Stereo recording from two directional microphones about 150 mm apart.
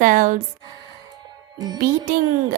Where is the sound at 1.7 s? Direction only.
65° right (ahead or behind).